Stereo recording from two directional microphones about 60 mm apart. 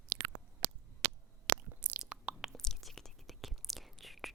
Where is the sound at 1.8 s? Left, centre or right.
Right.